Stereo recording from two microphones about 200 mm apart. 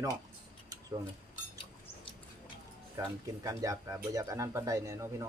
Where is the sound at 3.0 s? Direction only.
15° right (ahead or behind).